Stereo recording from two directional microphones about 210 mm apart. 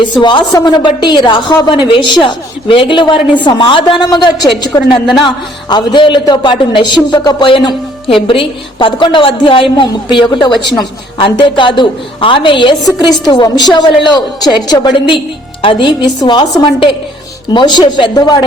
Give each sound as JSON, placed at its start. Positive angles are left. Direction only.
{"t": 0.0, "sound": "a man's voice", "side_deg": 20}